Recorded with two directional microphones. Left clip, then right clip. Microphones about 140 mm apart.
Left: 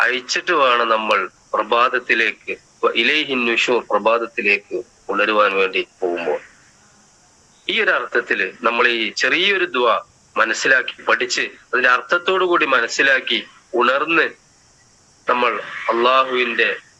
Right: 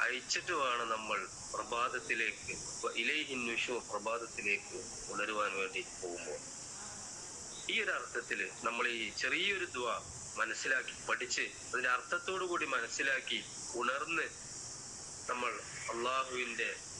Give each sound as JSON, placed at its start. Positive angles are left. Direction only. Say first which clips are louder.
{"t": 0.0, "sound": "speech", "louder": "left 17 dB", "side_deg": 90}
{"t": 7.7, "sound": "speech", "louder": "left 18 dB", "side_deg": 90}